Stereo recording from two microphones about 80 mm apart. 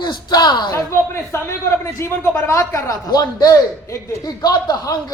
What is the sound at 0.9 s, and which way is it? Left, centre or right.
A man's voice, left.